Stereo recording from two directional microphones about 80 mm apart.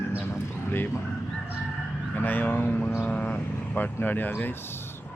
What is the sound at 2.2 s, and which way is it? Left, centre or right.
Speech, left.